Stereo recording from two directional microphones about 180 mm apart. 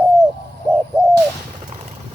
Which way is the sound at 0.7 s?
20° right (ahead or behind).